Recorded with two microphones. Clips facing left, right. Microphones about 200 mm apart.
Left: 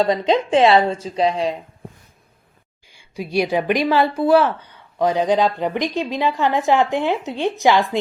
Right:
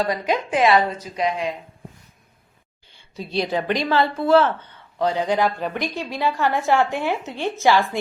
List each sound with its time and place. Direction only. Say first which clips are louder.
0.0 s a woman's voice: left 5 dB; 25° left (ahead or behind)
2.8 s a woman's voice: left 4 dB; 10° left (ahead or behind)